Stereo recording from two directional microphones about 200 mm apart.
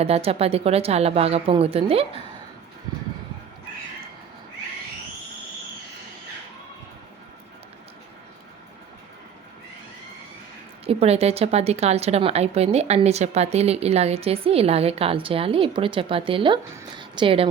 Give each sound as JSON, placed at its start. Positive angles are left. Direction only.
{"t": 0.0, "sound": "a woman's voice", "side_deg": -30}
{"t": 10.8, "sound": "a woman's voice", "side_deg": -30}